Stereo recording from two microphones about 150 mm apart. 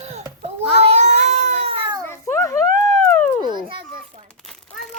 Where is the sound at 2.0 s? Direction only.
15° left (ahead or behind).